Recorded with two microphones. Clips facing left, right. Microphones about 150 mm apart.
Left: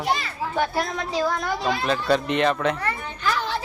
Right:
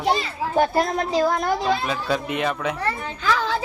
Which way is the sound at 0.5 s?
40° right (ahead or behind).